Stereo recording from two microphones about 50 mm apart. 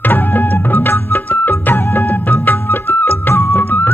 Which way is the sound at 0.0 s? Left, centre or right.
Left.